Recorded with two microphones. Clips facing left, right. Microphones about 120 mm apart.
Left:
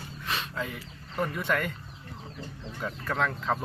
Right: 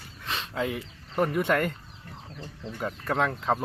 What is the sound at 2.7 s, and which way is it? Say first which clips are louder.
Speech: right 3 dB; 45° right (ahead or behind).